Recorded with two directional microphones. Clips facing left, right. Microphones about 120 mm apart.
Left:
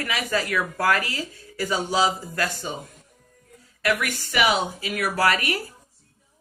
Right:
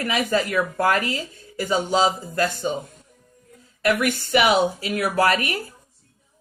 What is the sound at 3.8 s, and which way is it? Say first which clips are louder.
Speech: right 4 dB; 25° right (ahead or behind).